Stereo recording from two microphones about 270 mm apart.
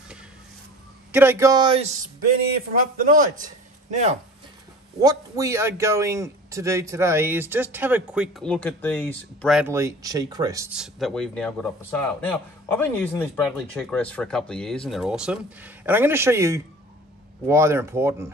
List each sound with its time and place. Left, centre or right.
1.1 s a man's voice: centre; by 4.2 s right
5.0 s a man's voice: centre